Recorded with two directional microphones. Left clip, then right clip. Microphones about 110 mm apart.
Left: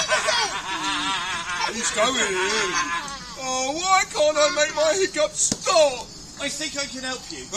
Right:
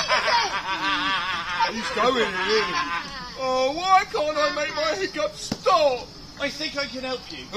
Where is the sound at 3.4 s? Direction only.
15° right (ahead or behind).